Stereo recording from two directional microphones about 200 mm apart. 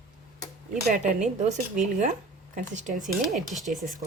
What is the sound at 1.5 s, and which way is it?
Speech, 35° right (ahead or behind).